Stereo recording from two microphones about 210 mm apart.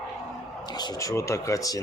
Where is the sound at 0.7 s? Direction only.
15° left (ahead or behind).